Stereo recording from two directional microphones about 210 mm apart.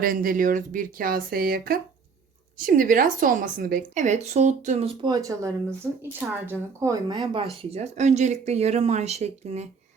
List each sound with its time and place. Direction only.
0.0 s a woman's voice: 45° right (ahead or behind)
5.0 s a woman's voice: 15° right (ahead or behind)
7.7 s a woman's voice: 30° right (ahead or behind)